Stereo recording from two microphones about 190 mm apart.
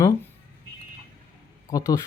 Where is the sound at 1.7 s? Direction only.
20° left (ahead or behind).